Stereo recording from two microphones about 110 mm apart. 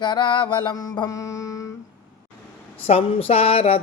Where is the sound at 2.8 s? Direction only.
60° left (ahead or behind).